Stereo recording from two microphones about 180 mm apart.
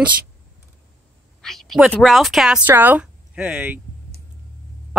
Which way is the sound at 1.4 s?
Centre (ahead or behind).